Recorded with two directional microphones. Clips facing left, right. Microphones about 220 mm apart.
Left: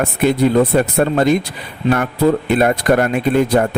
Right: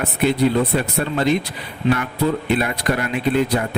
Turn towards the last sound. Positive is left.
turn(degrees=45)  # may be behind; listen again after turning